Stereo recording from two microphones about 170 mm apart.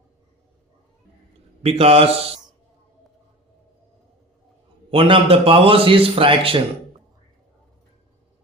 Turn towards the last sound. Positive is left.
turn(degrees=-30)  # may be behind; listen again after turning